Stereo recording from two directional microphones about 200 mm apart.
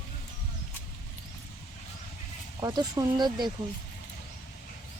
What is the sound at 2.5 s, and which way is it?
Speech, 20° right (ahead or behind).